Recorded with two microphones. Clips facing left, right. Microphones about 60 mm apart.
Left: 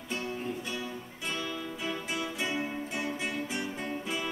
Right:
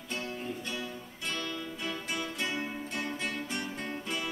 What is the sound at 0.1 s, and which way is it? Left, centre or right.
Music, centre.